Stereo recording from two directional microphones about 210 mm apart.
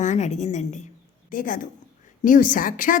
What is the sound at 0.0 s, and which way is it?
A woman's voice, 35° left (ahead or behind).